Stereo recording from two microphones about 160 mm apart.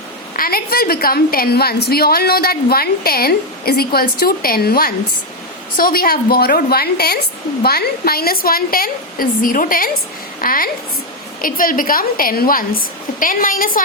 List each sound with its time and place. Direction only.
0.3 s a woman's voice: 65° left (ahead or behind)